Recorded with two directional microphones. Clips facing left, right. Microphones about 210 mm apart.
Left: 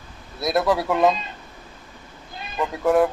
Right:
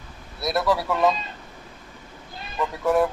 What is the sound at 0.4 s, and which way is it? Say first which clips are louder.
Speech: left 2 dB; 20° left (ahead or behind).